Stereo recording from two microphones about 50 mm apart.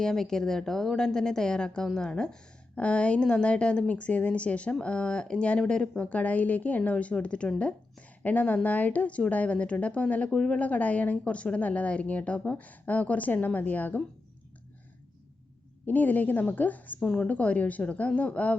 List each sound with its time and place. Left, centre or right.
0.0 s a woman's voice: centre
6.1 s a woman's voice: left
8.2 s a woman's voice: left
10.3 s a woman's voice: centre
10.6 s a woman's voice: left
15.9 s a woman's voice: left
17.0 s a woman's voice: centre
17.2 s a woman's voice: left